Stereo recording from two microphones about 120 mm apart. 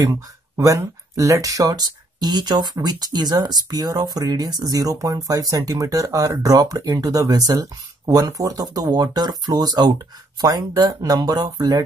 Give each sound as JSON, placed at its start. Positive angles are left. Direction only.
{"t": 0.0, "sound": "speech", "side_deg": -25}